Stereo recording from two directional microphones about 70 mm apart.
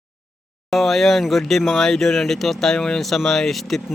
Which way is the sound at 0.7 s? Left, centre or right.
Centre.